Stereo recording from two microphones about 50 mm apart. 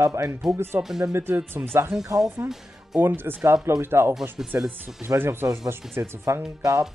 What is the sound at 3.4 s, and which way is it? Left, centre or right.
Speech, right.